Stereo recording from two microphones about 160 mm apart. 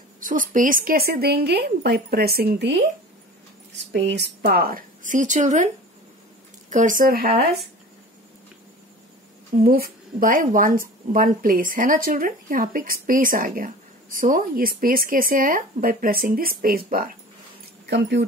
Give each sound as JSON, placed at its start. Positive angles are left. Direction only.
{"t": 0.2, "sound": "speech", "side_deg": -55}
{"t": 3.7, "sound": "a woman's voice", "side_deg": -90}
{"t": 6.7, "sound": "a woman's voice", "side_deg": -55}
{"t": 9.6, "sound": "speech", "side_deg": -70}
{"t": 10.1, "sound": "a woman's voice", "side_deg": -55}
{"t": 17.8, "sound": "speech", "side_deg": -90}